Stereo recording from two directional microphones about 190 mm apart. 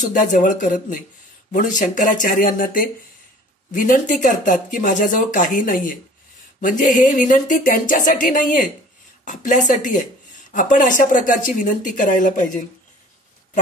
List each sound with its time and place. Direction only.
0.0 s speech: 40° left (ahead or behind)